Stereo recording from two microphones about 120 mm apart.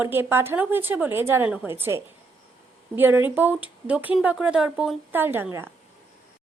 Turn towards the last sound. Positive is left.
turn(degrees=-20)  # may be behind; listen again after turning